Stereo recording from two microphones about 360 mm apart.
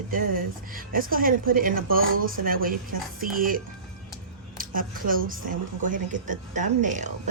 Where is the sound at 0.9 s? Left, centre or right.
Right.